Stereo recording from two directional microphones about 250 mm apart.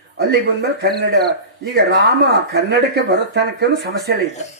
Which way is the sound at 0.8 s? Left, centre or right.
Right.